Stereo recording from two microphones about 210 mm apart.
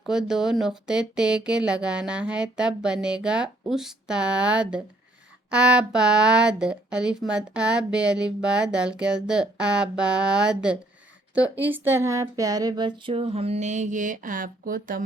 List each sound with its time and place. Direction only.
0.0 s speech: centre (ahead or behind); by 15.0 s 40° right (ahead or behind)